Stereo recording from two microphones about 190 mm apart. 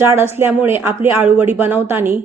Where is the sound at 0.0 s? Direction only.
15° right (ahead or behind).